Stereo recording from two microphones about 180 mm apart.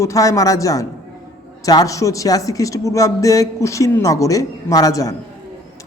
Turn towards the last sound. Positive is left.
turn(degrees=20)  # may be behind; listen again after turning